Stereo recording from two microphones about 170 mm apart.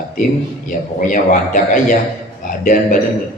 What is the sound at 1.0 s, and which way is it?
A man's voice, 50° left (ahead or behind).